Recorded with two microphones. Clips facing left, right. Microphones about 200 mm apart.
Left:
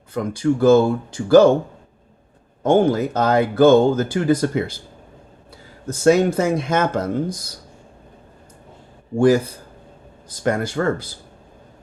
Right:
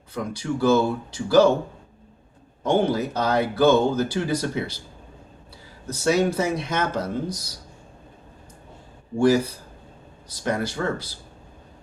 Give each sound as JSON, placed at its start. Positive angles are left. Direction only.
{"t": 0.1, "sound": "speech", "side_deg": 50}
{"t": 2.6, "sound": "speech", "side_deg": 50}
{"t": 5.9, "sound": "speech", "side_deg": 50}
{"t": 9.1, "sound": "speech", "side_deg": 50}